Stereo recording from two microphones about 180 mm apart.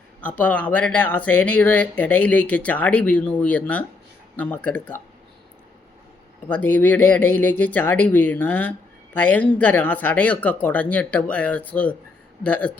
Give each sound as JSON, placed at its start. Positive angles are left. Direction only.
{"t": 0.2, "sound": "speech", "side_deg": 10}
{"t": 6.5, "sound": "speech", "side_deg": 10}